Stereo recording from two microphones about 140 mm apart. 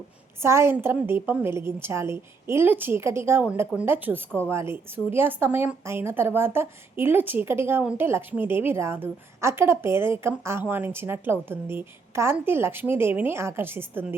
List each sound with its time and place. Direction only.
0.4 s speech: 20° right (ahead or behind)